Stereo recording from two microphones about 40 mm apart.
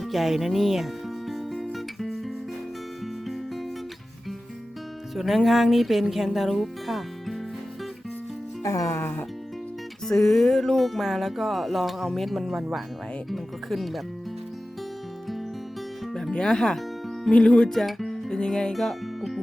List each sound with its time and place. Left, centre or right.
0.0 s speech: centre
1.3 s music: centre
5.1 s speech: centre
6.5 s music: centre
9.0 s speech: left
10.1 s speech: centre
16.3 s speech: centre
17.3 s speech: left
17.7 s speech: centre
18.1 s music: centre
18.7 s music: centre